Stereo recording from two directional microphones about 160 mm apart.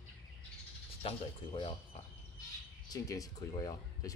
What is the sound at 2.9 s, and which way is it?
Speech, 20° left (ahead or behind).